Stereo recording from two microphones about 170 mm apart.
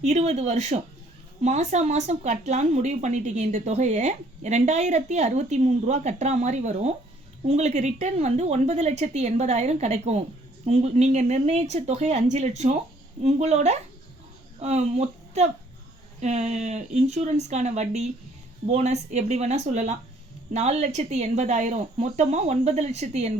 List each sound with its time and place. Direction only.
0.0 s speech: 40° right (ahead or behind)